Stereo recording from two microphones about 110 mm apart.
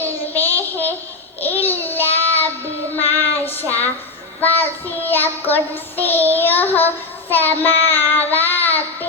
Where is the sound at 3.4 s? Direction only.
15° left (ahead or behind).